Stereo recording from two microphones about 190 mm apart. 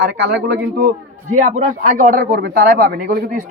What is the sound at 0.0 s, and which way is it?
Speech, 65° right (ahead or behind).